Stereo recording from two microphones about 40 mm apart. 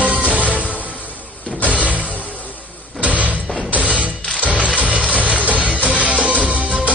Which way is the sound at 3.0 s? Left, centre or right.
Right.